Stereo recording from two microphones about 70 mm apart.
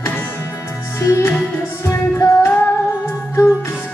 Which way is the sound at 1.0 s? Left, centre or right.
Left.